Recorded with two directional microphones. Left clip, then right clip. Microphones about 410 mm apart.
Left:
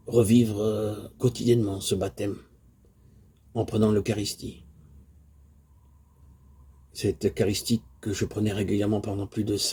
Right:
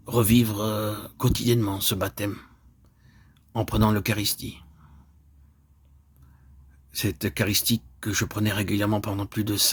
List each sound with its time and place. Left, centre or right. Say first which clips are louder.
0.0 s speech: left 1 dB; right
3.5 s speech: even; right
6.9 s speech: left 2 dB; right